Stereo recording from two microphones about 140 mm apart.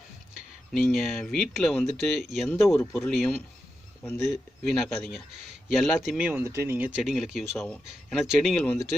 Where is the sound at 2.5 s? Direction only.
20° left (ahead or behind).